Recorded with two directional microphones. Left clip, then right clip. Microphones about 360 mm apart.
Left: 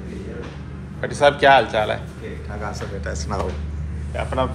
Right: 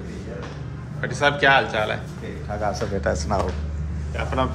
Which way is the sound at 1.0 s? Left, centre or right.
Centre.